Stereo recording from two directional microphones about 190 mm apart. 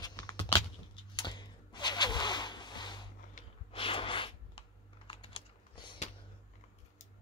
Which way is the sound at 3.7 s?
30° left (ahead or behind).